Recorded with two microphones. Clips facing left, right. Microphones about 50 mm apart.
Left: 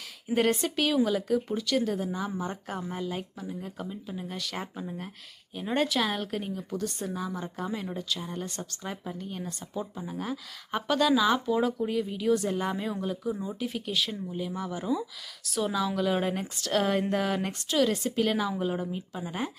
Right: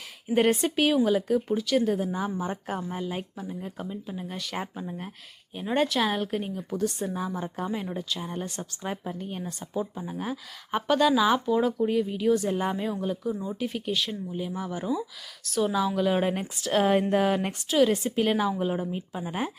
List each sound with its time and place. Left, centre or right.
0.3 s a woman's voice: centre
7.9 s a woman's voice: centre
9.4 s a woman's voice: centre
15.7 s a woman's voice: centre